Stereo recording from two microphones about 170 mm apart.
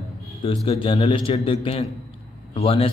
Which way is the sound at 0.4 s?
30° left (ahead or behind).